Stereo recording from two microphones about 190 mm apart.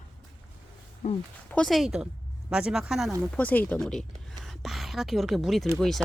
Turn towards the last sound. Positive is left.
turn(degrees=0)  # may be behind; listen again after turning